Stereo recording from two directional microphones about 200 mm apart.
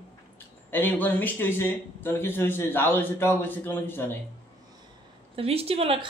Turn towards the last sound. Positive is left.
turn(degrees=-30)  # may be behind; listen again after turning